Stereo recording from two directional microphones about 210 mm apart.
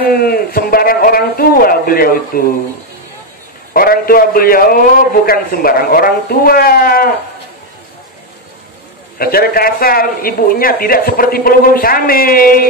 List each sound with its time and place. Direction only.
0.1 s a man's voice: 45° left (ahead or behind)
3.7 s speech: 45° left (ahead or behind)
9.2 s speech: 45° left (ahead or behind)